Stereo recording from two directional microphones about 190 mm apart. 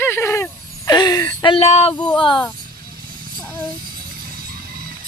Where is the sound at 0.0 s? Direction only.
15° left (ahead or behind); by 1.9 s 35° left (ahead or behind).